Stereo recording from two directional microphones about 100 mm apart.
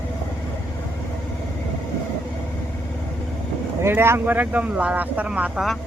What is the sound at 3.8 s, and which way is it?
Speech, 25° right (ahead or behind).